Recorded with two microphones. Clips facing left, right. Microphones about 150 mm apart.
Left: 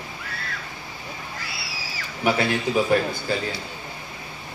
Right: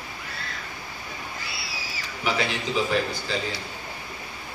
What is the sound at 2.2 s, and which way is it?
A man's voice, 50° left (ahead or behind).